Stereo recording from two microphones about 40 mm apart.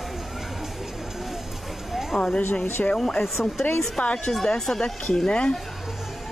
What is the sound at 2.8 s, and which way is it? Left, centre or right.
Speech, left.